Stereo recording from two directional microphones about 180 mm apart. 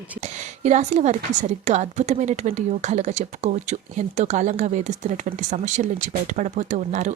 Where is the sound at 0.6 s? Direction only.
40° right (ahead or behind).